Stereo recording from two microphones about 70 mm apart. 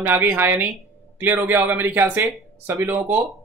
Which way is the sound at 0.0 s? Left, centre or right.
Right.